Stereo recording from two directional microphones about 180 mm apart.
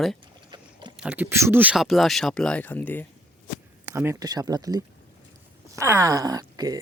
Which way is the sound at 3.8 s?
15° right (ahead or behind).